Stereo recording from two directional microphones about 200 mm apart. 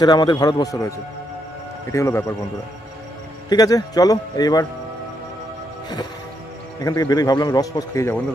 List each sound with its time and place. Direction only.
0.0 s a man's voice: 20° left (ahead or behind)
3.4 s a man's voice: 20° left (ahead or behind)
6.8 s a man's voice: 20° left (ahead or behind)